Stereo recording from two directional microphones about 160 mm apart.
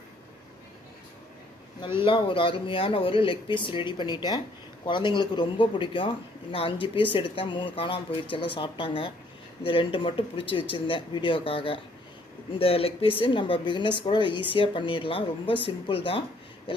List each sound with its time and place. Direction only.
2.0 s speech: 30° left (ahead or behind)